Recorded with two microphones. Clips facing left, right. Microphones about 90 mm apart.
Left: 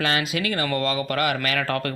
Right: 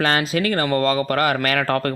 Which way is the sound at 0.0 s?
35° right (ahead or behind).